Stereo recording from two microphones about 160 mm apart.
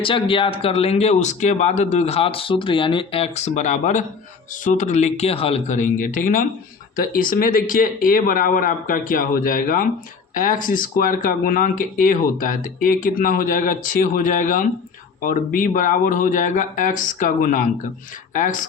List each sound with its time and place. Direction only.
0.0 s speech: 35° left (ahead or behind); by 18.6 s 55° left (ahead or behind)